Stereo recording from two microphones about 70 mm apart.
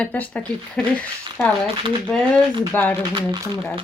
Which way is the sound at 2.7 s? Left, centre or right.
Left.